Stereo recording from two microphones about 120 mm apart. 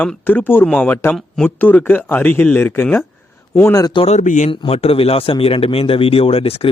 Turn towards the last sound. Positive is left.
turn(degrees=55)  # may be behind; listen again after turning